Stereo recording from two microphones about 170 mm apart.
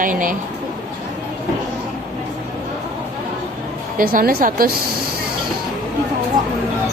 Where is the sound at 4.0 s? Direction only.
55° right (ahead or behind).